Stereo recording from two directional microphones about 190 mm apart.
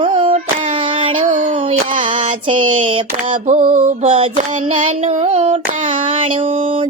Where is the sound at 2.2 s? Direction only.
25° right (ahead or behind).